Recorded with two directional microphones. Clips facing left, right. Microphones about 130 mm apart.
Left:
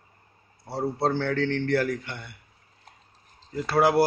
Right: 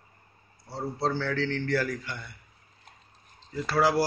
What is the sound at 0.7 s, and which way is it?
A man's voice, 65° left (ahead or behind).